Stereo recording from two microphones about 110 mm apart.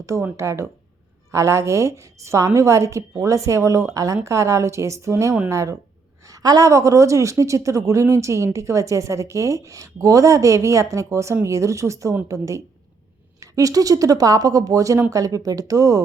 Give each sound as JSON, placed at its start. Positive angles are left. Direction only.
{"t": 0.0, "sound": "a woman's voice", "side_deg": -30}